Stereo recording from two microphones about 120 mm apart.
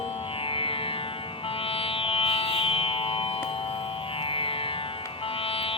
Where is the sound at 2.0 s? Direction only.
50° left (ahead or behind).